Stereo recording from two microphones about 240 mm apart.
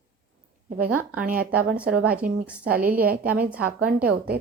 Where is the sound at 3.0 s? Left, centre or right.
Right.